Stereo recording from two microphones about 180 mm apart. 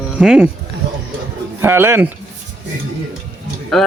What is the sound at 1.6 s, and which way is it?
Speech, 15° right (ahead or behind).